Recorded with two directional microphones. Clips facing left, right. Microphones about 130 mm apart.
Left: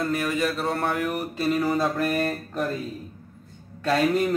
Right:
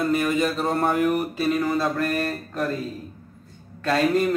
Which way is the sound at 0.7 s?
35° right (ahead or behind).